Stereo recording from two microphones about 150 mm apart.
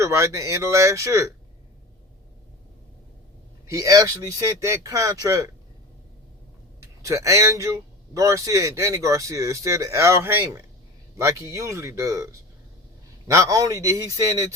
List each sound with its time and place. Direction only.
0.0 s a man's voice: 20° right (ahead or behind)
3.7 s a man's voice: 20° right (ahead or behind)
6.7 s a man's voice: 20° right (ahead or behind)